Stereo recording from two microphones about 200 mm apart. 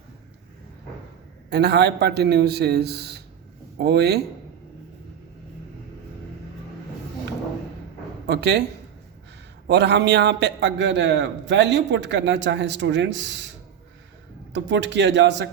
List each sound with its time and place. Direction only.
1.5 s a man's voice: 55° right (ahead or behind)
8.3 s a man's voice: 55° right (ahead or behind)
9.6 s a man's voice: 60° right (ahead or behind)
14.5 s a man's voice: 60° right (ahead or behind)